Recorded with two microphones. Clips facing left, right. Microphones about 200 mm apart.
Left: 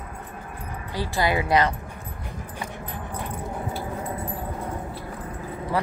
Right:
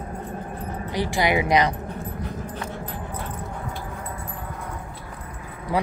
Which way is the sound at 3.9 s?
25° left (ahead or behind).